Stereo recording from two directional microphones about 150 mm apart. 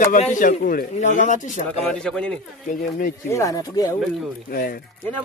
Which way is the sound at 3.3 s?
20° left (ahead or behind).